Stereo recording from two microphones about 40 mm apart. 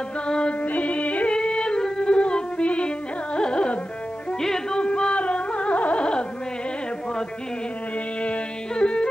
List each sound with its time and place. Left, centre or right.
0.3 s music: left
0.6 s music: left
1.3 s a sound: left
2.1 s music: left
3.3 s carnatic music: left
4.4 s music: centre
4.7 s music: left
8.2 s music: left